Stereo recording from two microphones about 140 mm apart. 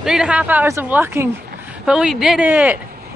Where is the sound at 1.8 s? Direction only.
5° right (ahead or behind).